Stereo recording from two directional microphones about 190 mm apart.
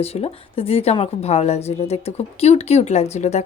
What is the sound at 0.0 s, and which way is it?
A woman's voice, 30° left (ahead or behind).